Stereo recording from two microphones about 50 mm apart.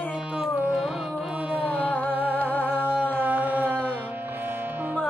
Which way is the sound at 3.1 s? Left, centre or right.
Right.